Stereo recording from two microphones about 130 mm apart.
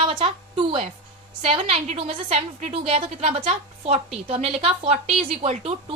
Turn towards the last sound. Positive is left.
turn(degrees=-50)  # may be behind; listen again after turning